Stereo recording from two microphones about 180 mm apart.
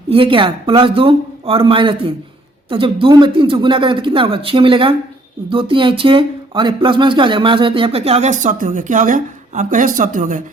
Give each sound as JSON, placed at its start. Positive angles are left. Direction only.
{"t": 0.1, "sound": "speech", "side_deg": -30}